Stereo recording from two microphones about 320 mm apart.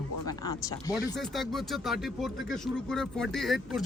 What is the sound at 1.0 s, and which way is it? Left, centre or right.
Speech, centre.